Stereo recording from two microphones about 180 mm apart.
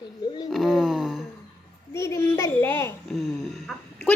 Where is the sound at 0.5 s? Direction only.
Centre (ahead or behind).